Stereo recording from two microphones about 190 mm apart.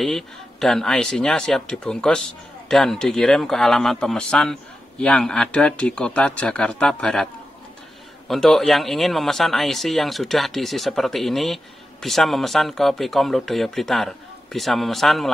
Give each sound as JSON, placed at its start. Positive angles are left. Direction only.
{"t": 0.0, "sound": "speech", "side_deg": 0}
{"t": 8.3, "sound": "speech", "side_deg": 0}